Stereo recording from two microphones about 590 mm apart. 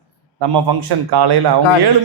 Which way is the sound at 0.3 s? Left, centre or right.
Right.